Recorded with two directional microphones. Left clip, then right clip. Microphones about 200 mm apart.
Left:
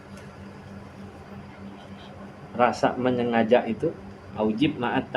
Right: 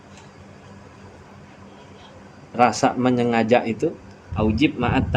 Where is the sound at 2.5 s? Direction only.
55° right (ahead or behind).